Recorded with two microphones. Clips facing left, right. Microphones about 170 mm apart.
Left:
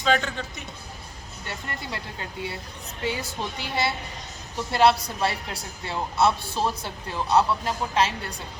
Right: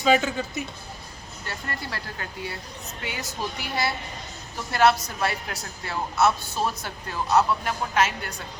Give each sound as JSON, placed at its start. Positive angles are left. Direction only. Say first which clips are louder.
{"t": 0.0, "sound": "speech", "louder": "right 3 dB", "side_deg": -5}
{"t": 1.5, "sound": "a woman's voice", "louder": "even", "side_deg": 20}